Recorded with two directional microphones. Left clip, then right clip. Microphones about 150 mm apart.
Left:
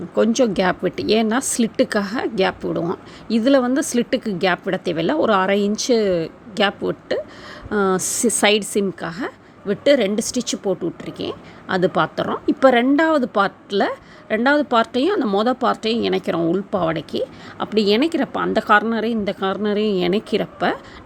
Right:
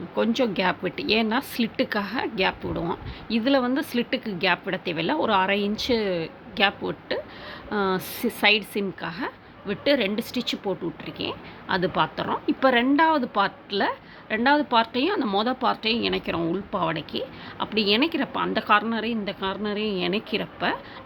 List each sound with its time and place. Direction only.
0.1 s speech: 35° left (ahead or behind)